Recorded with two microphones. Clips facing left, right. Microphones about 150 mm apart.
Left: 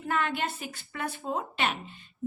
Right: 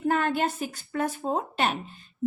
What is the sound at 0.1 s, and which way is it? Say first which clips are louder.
A woman's voice: right 3 dB; 40° right (ahead or behind).